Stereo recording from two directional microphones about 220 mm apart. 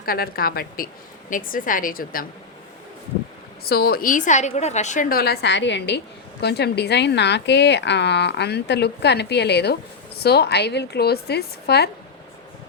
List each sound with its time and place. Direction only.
0.0 s a woman's voice: 40° left (ahead or behind)
3.7 s speech: 45° left (ahead or behind)